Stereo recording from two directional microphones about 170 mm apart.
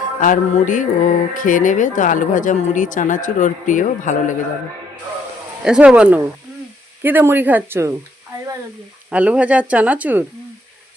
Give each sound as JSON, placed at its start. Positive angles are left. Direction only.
{"t": 0.2, "sound": "speech", "side_deg": 50}
{"t": 5.6, "sound": "speech", "side_deg": -5}
{"t": 9.0, "sound": "speech", "side_deg": -10}